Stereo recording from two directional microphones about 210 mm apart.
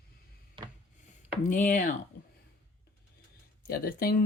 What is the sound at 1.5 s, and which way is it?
Speech, 40° left (ahead or behind).